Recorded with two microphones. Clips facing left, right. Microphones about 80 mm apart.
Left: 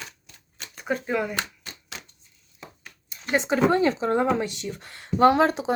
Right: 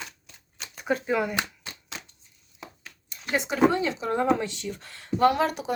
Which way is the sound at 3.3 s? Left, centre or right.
Left.